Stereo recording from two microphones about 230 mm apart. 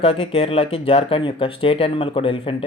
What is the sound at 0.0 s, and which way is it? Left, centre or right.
Speech, left.